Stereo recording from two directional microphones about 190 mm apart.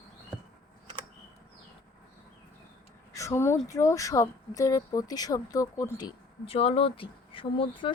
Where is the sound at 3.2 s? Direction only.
15° left (ahead or behind).